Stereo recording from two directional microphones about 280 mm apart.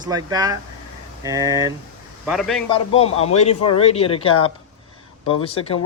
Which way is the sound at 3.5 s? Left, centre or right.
Left.